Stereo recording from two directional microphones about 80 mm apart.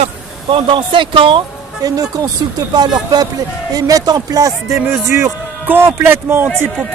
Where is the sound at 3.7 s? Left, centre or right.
Right.